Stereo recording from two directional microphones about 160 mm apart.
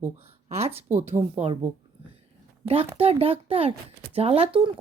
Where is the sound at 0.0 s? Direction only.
40° right (ahead or behind).